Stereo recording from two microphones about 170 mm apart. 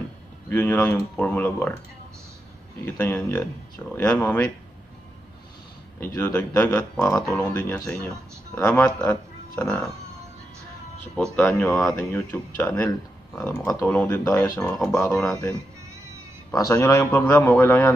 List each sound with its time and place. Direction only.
0.5 s speech: 10° left (ahead or behind)
2.8 s speech: 10° left (ahead or behind)
5.9 s speech: 10° left (ahead or behind)
11.3 s speech: 10° left (ahead or behind)
14.6 s speech: 5° left (ahead or behind)
16.5 s speech: 20° left (ahead or behind)